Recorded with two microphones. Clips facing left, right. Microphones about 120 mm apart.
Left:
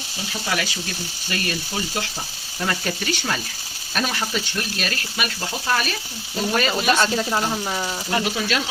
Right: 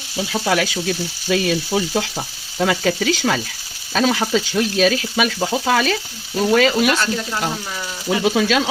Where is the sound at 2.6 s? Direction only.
90° right.